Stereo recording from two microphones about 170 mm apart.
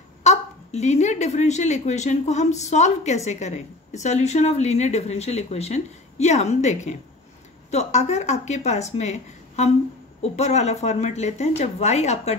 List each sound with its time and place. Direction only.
0.2 s a woman's voice: 40° left (ahead or behind)
10.3 s a woman's voice: 40° left (ahead or behind)